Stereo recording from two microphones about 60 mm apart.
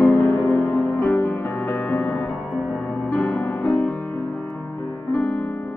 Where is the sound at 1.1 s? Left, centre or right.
Left.